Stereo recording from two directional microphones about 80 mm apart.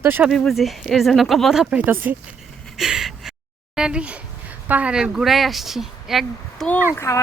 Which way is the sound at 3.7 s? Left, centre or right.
Centre.